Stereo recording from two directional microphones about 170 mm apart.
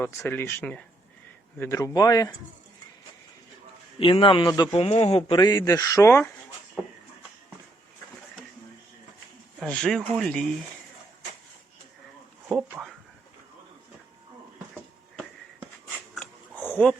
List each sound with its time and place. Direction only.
0.0 s speech: 15° left (ahead or behind)
4.0 s speech: 30° left (ahead or behind); by 6.3 s 15° left (ahead or behind)
9.6 s speech: 5° left (ahead or behind)
16.1 s dog: 5° left (ahead or behind)